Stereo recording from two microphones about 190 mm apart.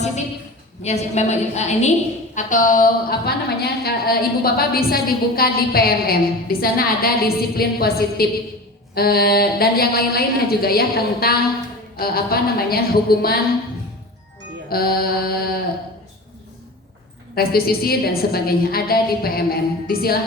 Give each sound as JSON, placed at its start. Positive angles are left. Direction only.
{"t": 0.8, "sound": "a woman's voice", "side_deg": 35}
{"t": 14.7, "sound": "a woman's voice", "side_deg": 55}
{"t": 17.3, "sound": "a woman's voice", "side_deg": 55}